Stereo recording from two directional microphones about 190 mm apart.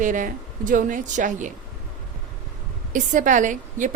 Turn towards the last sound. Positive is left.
turn(degrees=-40)  # may be behind; listen again after turning